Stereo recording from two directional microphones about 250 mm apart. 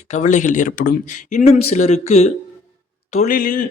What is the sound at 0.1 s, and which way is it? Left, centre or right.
A man's voice, left.